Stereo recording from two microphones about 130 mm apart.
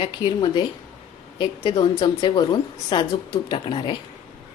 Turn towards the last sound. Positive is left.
turn(degrees=40)  # may be behind; listen again after turning